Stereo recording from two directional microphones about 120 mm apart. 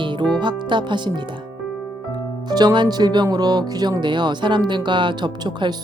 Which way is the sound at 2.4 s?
35° right (ahead or behind).